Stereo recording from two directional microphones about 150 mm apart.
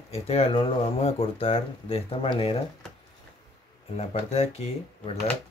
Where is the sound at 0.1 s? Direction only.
40° left (ahead or behind).